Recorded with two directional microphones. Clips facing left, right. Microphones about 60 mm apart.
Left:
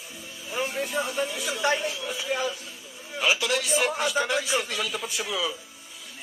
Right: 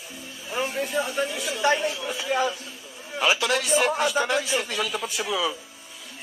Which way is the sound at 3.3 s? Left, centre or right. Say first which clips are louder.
Right 2 dB; right.